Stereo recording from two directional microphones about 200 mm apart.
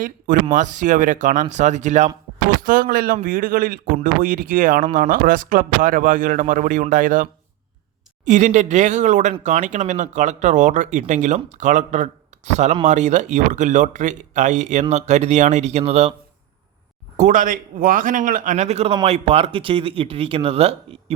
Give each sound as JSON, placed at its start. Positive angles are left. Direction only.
{"t": 0.5, "sound": "speech", "side_deg": -40}
{"t": 17.2, "sound": "speech", "side_deg": -40}